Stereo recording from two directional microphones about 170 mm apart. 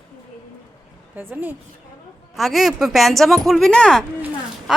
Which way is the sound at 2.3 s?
Centre (ahead or behind).